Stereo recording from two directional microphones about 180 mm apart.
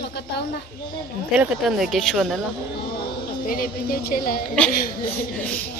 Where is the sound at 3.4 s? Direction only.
55° left (ahead or behind).